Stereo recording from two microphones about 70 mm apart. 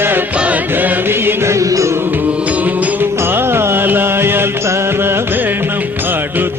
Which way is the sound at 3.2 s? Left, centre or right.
Right.